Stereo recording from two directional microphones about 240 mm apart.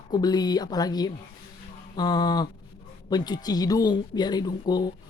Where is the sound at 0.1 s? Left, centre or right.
Centre.